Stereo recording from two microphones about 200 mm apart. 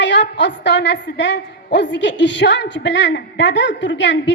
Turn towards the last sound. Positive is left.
turn(degrees=65)  # may be behind; listen again after turning